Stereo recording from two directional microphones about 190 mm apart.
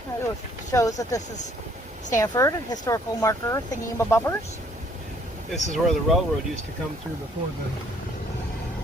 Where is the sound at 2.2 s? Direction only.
15° left (ahead or behind).